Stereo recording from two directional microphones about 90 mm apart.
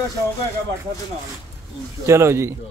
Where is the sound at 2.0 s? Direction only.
30° right (ahead or behind).